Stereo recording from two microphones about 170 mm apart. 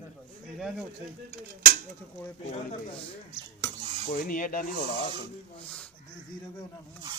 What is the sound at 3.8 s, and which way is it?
Cutlery, 35° right (ahead or behind).